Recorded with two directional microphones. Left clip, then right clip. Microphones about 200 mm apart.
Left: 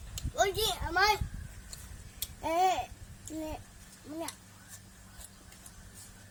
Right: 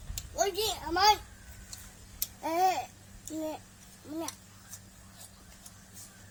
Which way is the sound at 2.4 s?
25° left (ahead or behind).